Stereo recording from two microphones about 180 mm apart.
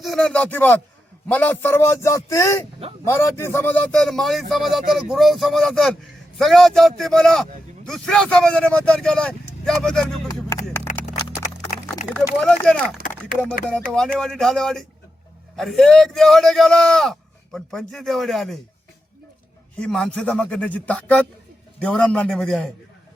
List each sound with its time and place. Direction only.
0.0 s a man's voice: centre (ahead or behind)
11.0 s a sound: 40° left (ahead or behind)
12.1 s speech: 5° left (ahead or behind)
13.9 s speech: 5° left (ahead or behind)
19.8 s speech: 5° left (ahead or behind)